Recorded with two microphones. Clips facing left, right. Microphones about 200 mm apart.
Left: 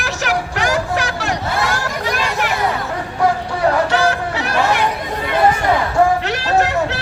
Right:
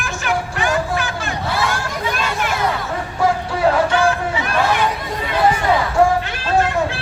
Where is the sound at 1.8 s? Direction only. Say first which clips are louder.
Left 2 dB; 75° left (ahead or behind).